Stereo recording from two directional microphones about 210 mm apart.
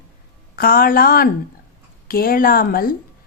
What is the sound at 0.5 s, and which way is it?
Speech, 45° left (ahead or behind).